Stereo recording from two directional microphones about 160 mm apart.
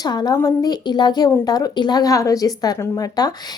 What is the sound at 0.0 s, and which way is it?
Speech, 25° left (ahead or behind).